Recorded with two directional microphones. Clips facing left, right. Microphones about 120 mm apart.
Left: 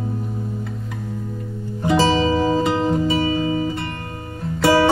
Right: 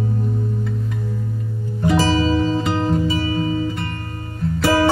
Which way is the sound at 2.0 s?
25° left (ahead or behind).